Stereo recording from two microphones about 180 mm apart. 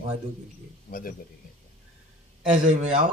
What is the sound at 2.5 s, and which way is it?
Speech, 45° right (ahead or behind).